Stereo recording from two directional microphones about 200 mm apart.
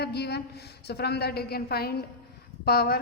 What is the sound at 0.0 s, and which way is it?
A woman's voice, 55° left (ahead or behind).